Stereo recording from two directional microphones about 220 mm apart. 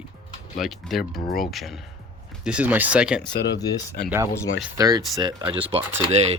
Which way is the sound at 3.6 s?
15° left (ahead or behind).